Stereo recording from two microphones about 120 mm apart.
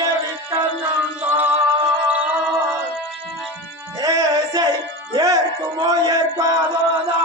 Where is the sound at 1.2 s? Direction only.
15° right (ahead or behind).